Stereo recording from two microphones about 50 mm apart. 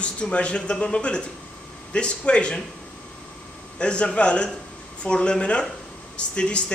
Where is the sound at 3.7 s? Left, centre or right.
Left.